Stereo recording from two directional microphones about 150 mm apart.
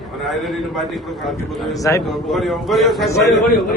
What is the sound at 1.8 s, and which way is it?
Speech, 20° left (ahead or behind).